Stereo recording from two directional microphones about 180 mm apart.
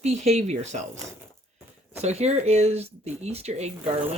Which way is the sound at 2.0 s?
35° right (ahead or behind).